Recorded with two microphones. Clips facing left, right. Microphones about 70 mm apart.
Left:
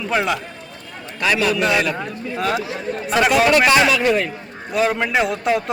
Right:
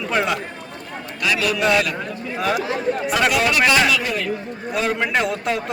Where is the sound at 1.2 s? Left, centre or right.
Left.